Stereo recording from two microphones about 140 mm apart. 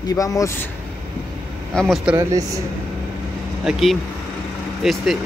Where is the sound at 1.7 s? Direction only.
Centre (ahead or behind).